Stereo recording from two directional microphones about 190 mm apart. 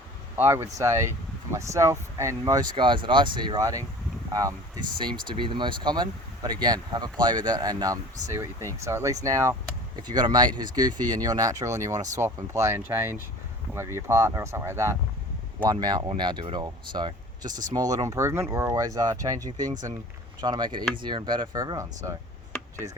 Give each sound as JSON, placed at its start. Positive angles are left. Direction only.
{"t": 0.3, "sound": "speech", "side_deg": -15}